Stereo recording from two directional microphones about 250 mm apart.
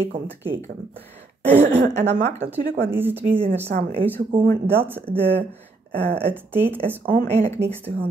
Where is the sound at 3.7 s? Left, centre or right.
Right.